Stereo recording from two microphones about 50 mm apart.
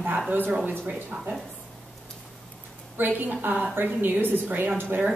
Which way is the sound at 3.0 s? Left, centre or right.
Right.